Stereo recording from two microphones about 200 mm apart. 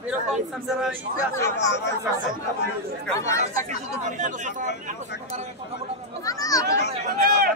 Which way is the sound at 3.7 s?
40° right (ahead or behind).